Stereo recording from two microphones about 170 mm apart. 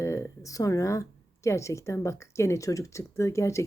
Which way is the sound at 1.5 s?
15° left (ahead or behind).